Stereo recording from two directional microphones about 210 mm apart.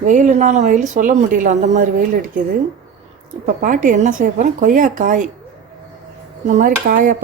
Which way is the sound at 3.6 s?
35° right (ahead or behind).